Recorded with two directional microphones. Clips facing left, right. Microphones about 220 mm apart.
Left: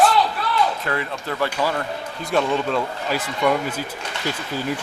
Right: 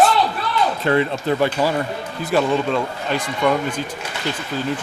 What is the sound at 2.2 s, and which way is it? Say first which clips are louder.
Speech: right 3 dB; 5° right (ahead or behind).